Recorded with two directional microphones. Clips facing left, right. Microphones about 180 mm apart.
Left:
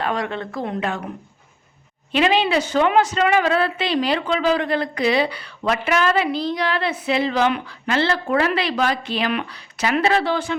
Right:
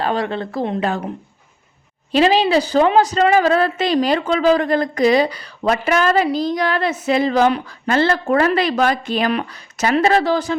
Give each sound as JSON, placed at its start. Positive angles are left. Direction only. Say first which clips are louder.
{"t": 0.0, "sound": "a woman's voice", "louder": "right 4 dB", "side_deg": -30}
{"t": 2.1, "sound": "a woman's voice", "louder": "right 4 dB", "side_deg": -35}